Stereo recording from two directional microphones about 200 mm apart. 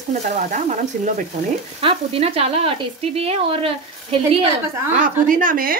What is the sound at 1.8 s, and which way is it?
Speech, 30° right (ahead or behind).